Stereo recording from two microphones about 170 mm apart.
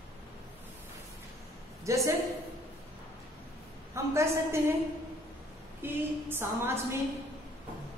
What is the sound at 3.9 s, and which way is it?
Speech, 15° right (ahead or behind).